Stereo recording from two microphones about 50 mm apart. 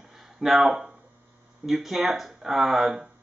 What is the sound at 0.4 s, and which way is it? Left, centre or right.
Speech, centre.